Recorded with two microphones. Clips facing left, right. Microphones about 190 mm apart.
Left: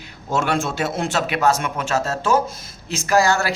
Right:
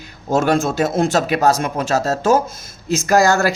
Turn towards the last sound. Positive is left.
turn(degrees=-45)  # may be behind; listen again after turning